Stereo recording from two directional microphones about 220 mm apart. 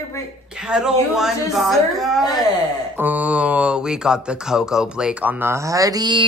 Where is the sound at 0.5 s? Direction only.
5° right (ahead or behind).